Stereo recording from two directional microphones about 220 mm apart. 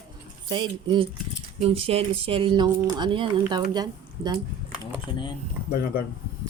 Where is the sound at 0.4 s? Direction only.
20° right (ahead or behind).